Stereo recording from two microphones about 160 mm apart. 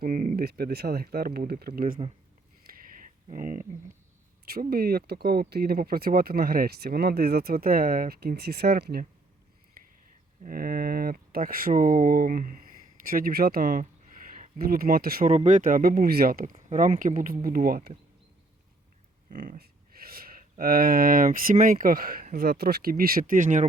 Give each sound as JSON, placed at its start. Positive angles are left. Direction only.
{"t": 0.0, "sound": "speech", "side_deg": -55}
{"t": 2.6, "sound": "a sound", "side_deg": -60}
{"t": 3.2, "sound": "speech", "side_deg": -55}
{"t": 4.7, "sound": "speech", "side_deg": -75}
{"t": 9.8, "sound": "a sound", "side_deg": -65}
{"t": 10.4, "sound": "speech", "side_deg": -65}
{"t": 15.3, "sound": "speech", "side_deg": -50}
{"t": 19.3, "sound": "speech", "side_deg": -55}
{"t": 19.5, "sound": "speech", "side_deg": -70}